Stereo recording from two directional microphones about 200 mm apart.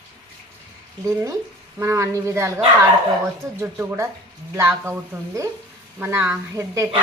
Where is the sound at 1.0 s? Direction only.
15° right (ahead or behind).